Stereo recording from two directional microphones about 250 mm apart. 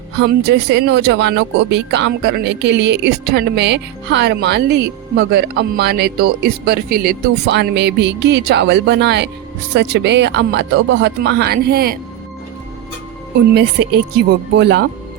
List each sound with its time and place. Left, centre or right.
0.2 s speech: right
13.5 s speech: right